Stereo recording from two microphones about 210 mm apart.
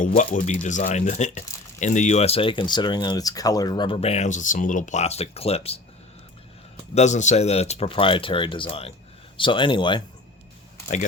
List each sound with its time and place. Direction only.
0.1 s speech: 35° left (ahead or behind)
6.9 s speech: 35° left (ahead or behind)